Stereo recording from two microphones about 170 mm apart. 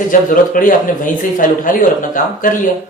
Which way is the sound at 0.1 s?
50° left (ahead or behind).